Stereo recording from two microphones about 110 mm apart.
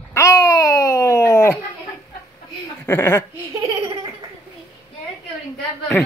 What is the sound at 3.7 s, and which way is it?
Laughter, 60° right (ahead or behind).